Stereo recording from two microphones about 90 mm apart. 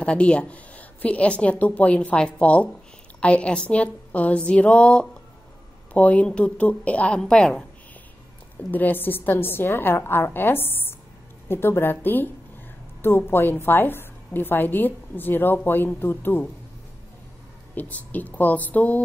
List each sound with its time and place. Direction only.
0.0 s a woman's voice: 10° left (ahead or behind)
8.7 s a woman's voice: 20° left (ahead or behind)
17.7 s a woman's voice: 15° left (ahead or behind)